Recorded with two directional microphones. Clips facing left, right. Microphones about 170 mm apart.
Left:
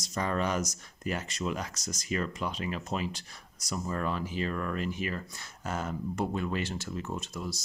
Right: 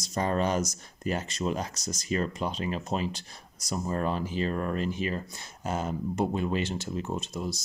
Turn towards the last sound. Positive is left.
turn(degrees=-25)  # may be behind; listen again after turning